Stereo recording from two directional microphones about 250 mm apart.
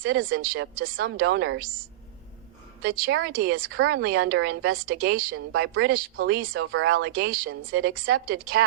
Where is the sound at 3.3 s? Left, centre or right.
Right.